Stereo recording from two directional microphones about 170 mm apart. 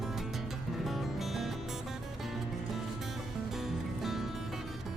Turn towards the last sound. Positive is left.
turn(degrees=0)  # may be behind; listen again after turning